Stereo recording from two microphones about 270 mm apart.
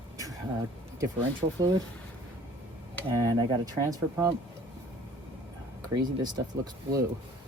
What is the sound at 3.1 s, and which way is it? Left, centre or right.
Speech, centre.